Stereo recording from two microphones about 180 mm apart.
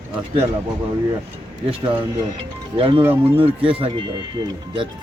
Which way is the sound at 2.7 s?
30° right (ahead or behind).